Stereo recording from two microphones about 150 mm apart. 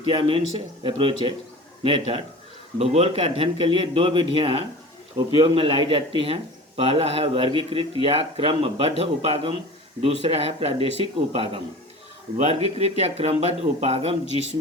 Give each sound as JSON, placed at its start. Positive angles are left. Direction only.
{"t": 0.1, "sound": "speech", "side_deg": -35}